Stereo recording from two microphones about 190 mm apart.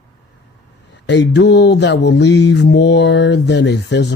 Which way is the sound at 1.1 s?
65° left (ahead or behind).